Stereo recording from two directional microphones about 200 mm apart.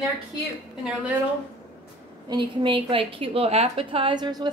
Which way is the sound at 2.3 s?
25° right (ahead or behind).